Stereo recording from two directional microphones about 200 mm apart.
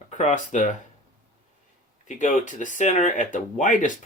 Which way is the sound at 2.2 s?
40° left (ahead or behind).